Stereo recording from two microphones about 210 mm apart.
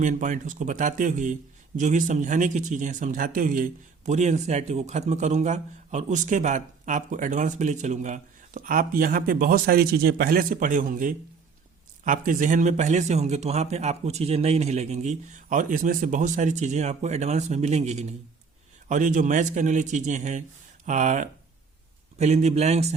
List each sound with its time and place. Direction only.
0.0 s a man's voice: 35° right (ahead or behind)